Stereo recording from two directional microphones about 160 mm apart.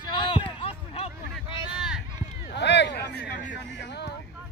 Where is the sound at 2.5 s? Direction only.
90° left.